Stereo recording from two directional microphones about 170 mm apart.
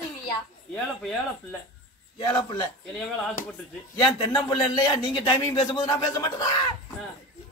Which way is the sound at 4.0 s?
25° left (ahead or behind).